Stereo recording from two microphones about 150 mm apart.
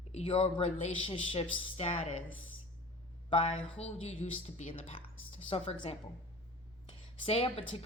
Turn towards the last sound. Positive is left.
turn(degrees=35)  # may be behind; listen again after turning